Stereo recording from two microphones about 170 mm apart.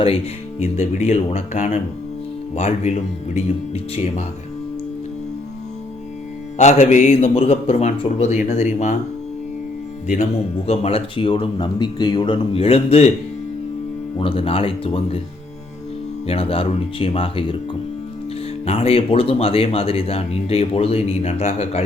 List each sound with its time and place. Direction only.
0.6 s speech: 40° left (ahead or behind)
6.6 s speech: 45° left (ahead or behind)
10.7 s speech: 35° left (ahead or behind)
14.2 s speech: 35° left (ahead or behind)
16.2 s speech: 35° left (ahead or behind)
18.6 s speech: 35° left (ahead or behind)